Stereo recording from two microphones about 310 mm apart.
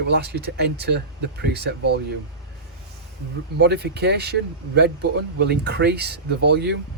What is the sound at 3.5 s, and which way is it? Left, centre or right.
Speech, right.